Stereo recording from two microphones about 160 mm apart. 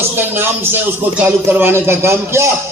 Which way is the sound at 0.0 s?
15° right (ahead or behind).